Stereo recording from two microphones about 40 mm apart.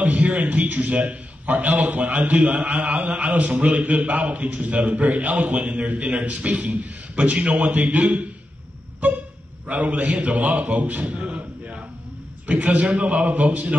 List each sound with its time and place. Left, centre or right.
0.0 s a man's voice: right
5.5 s a man's voice: right
9.7 s a man's voice: right
11.3 s a sound: right
12.4 s a man's voice: right